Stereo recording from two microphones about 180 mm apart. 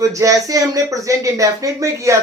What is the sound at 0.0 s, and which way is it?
Speech, 20° right (ahead or behind).